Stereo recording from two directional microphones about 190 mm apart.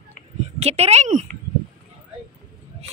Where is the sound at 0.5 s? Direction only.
35° right (ahead or behind).